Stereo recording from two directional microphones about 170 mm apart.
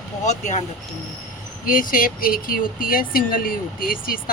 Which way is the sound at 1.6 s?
55° left (ahead or behind).